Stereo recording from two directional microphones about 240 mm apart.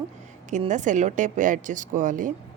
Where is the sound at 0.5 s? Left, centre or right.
Right.